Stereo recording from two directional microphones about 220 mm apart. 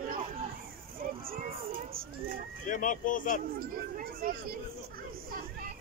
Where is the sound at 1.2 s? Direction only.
40° right (ahead or behind).